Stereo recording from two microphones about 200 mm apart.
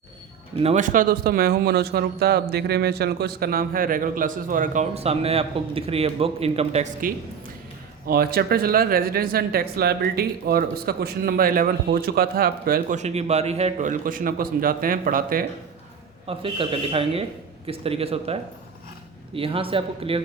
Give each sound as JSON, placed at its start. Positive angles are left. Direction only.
{"t": 0.5, "sound": "speech", "side_deg": -30}
{"t": 7.0, "sound": "speech", "side_deg": -45}
{"t": 16.2, "sound": "speech", "side_deg": -25}